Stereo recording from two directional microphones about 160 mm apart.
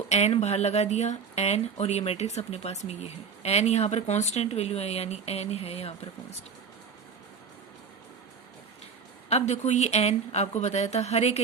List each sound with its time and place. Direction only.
0.1 s speech: 45° left (ahead or behind)
9.3 s speech: 45° left (ahead or behind)